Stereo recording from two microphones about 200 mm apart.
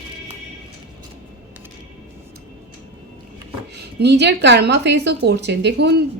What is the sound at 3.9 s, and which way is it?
A woman's voice, 55° right (ahead or behind).